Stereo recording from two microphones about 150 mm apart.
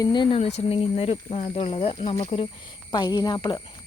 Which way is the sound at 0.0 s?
30° left (ahead or behind).